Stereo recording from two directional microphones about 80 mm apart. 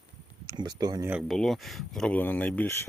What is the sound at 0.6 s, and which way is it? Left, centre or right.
Speech, right.